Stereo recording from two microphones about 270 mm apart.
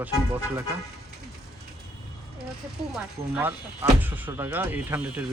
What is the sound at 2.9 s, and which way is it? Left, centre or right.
Speech, centre.